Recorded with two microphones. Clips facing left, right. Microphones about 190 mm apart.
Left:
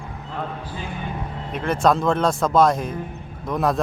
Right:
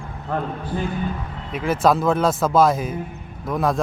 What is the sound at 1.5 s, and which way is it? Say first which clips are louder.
Speech: right 1 dB; 5° right (ahead or behind).